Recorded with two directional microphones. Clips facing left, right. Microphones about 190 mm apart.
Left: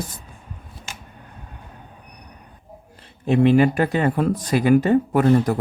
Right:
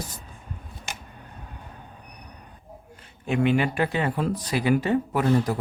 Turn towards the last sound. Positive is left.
turn(degrees=50)  # may be behind; listen again after turning